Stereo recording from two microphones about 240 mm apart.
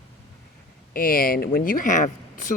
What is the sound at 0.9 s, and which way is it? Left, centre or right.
Speech, left.